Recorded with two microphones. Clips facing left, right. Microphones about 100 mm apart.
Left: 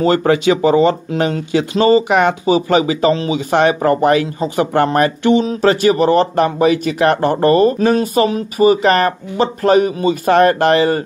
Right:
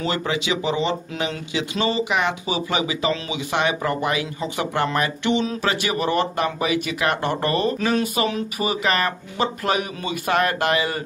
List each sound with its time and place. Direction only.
0.0 s speech: 45° left (ahead or behind)